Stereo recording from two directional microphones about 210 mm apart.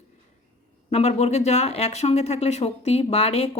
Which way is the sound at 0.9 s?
30° left (ahead or behind).